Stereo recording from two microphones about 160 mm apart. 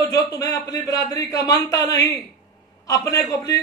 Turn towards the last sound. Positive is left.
turn(degrees=20)  # may be behind; listen again after turning